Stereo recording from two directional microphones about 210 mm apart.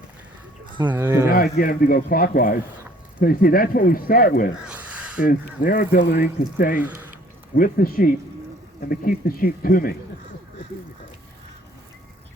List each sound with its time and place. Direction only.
0.9 s speech: 10° right (ahead or behind)
1.3 s speech: 45° left (ahead or behind)
4.7 s a sound: 5° right (ahead or behind)
5.6 s speech: 45° left (ahead or behind)
6.7 s speech: 10° right (ahead or behind)
7.5 s speech: 45° left (ahead or behind)